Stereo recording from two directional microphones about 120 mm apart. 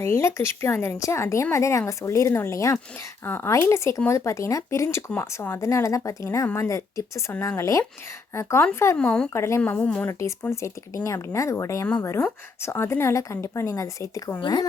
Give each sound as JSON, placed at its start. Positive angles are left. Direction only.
{"t": 0.0, "sound": "speech", "side_deg": 25}
{"t": 9.0, "sound": "a woman's voice", "side_deg": 10}
{"t": 9.3, "sound": "speech", "side_deg": 25}
{"t": 9.6, "sound": "a woman's voice", "side_deg": 10}
{"t": 10.1, "sound": "a woman's voice", "side_deg": 25}